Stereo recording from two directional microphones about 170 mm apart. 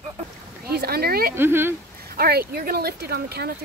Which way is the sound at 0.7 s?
65° right (ahead or behind).